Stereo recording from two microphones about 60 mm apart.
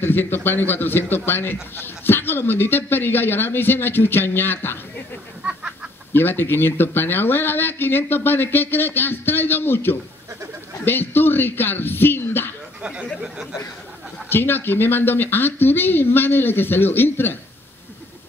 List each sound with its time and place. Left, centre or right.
0.0 s a man's voice: left
5.4 s a sound: centre
6.1 s a man's voice: left
13.2 s speech: centre
14.3 s a man's voice: left